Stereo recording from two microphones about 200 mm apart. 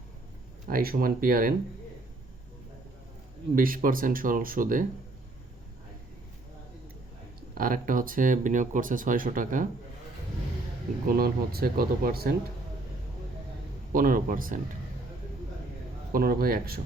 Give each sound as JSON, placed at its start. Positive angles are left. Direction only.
{"t": 0.7, "sound": "speech", "side_deg": -45}
{"t": 3.5, "sound": "speech", "side_deg": -45}
{"t": 7.5, "sound": "speech", "side_deg": -45}
{"t": 11.0, "sound": "speech", "side_deg": -50}
{"t": 13.9, "sound": "speech", "side_deg": -45}
{"t": 16.1, "sound": "speech", "side_deg": -45}